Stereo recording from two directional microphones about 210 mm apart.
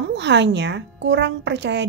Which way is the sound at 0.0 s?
55° right (ahead or behind).